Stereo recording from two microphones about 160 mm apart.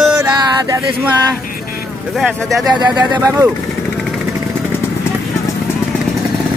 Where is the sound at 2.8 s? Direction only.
25° right (ahead or behind).